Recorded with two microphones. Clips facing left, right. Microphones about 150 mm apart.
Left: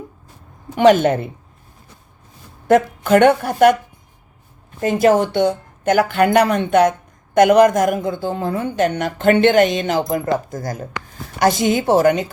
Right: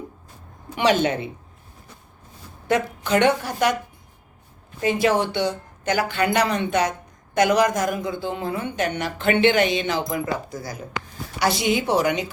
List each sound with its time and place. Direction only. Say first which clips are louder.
1.0 s speech: left 6 dB; 50° left (ahead or behind)
2.6 s speech: left 8 dB; 50° left (ahead or behind)
4.8 s speech: left 6 dB; 45° left (ahead or behind)